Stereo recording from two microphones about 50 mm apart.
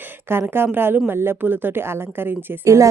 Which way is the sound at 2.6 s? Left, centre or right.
Right.